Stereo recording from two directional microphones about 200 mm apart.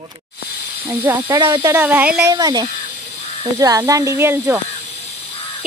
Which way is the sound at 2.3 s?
20° right (ahead or behind).